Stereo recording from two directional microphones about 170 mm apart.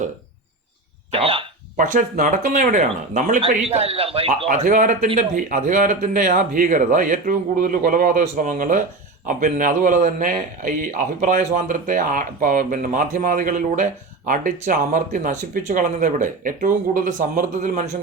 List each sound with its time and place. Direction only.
1.1 s a sound: 35° right (ahead or behind)
1.7 s speech: 50° right (ahead or behind)
3.5 s a man's voice: 35° right (ahead or behind)
4.4 s speech: 50° right (ahead or behind)